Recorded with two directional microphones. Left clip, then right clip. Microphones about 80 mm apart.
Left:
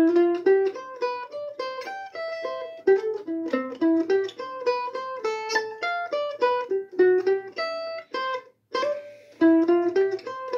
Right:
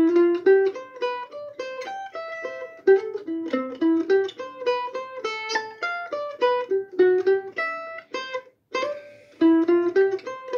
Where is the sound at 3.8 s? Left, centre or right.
Left.